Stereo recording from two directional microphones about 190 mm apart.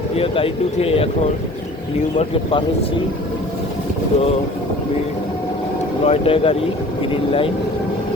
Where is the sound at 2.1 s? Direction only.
30° left (ahead or behind).